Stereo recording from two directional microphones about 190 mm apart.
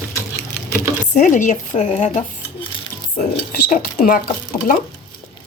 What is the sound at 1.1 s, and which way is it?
Speech, 40° left (ahead or behind).